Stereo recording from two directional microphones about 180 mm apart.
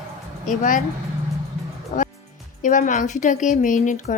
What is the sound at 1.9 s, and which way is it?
Music, 50° left (ahead or behind).